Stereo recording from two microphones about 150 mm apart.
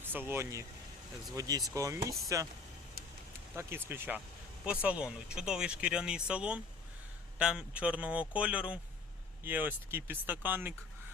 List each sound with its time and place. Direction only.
0.0 s speech: 15° right (ahead or behind)
3.5 s speech: 15° right (ahead or behind)